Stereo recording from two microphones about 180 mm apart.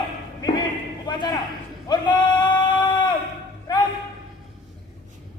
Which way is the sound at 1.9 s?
25° left (ahead or behind).